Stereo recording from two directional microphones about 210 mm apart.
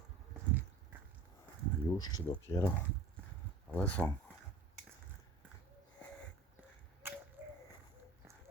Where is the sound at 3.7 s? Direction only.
5° left (ahead or behind).